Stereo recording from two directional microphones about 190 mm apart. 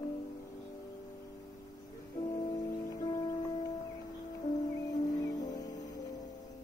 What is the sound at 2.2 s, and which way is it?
Music, 20° left (ahead or behind).